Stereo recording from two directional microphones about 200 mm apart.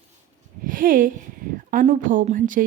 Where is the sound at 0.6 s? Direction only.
45° right (ahead or behind).